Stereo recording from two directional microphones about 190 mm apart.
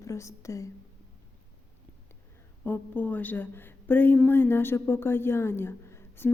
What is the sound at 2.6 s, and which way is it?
A woman's voice, 10° left (ahead or behind).